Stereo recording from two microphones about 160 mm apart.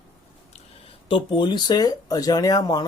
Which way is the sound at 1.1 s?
30° left (ahead or behind).